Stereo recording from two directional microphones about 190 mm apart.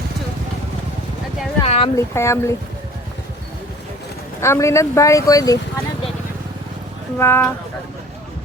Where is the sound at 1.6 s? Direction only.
35° left (ahead or behind).